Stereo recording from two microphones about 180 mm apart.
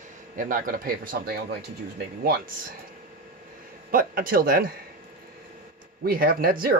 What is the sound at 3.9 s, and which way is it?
Speech, 50° right (ahead or behind).